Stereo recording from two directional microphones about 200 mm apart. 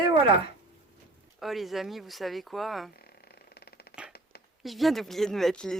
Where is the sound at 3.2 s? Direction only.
55° left (ahead or behind).